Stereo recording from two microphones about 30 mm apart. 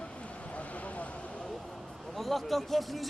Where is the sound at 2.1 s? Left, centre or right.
Centre.